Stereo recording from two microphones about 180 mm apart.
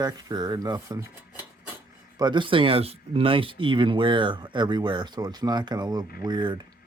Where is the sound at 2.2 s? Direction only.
25° right (ahead or behind).